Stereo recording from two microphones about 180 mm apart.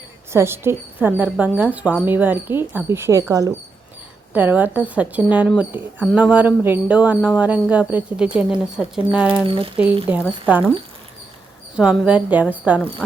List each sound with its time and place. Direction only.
0.3 s speech: 15° right (ahead or behind)
9.5 s speech: 30° right (ahead or behind)
10.1 s speech: 5° right (ahead or behind)
11.8 s speech: 5° right (ahead or behind)